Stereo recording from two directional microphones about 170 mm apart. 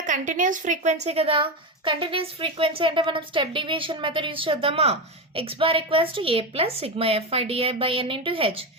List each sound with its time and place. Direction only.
0.0 s a woman's voice: 50° right (ahead or behind)
1.0 s a woman's voice: 35° right (ahead or behind)